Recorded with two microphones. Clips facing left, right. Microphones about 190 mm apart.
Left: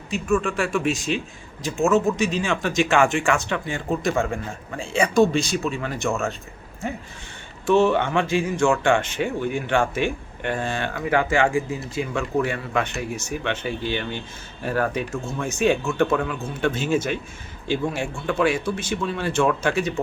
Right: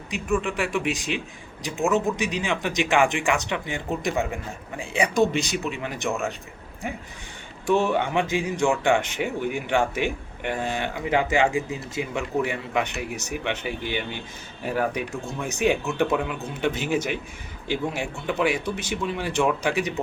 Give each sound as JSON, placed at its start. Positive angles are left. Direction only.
{"t": 0.1, "sound": "speech", "side_deg": -15}
{"t": 7.7, "sound": "speech", "side_deg": -15}